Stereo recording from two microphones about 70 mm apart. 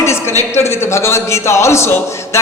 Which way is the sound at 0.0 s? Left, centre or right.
Left.